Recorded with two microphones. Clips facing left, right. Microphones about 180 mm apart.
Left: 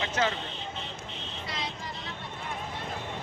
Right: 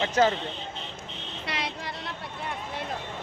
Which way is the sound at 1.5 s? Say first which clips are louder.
Right 4 dB; 70° right (ahead or behind).